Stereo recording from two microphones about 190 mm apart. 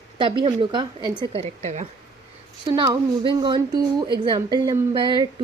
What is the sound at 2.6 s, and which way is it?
A woman's voice, 25° right (ahead or behind).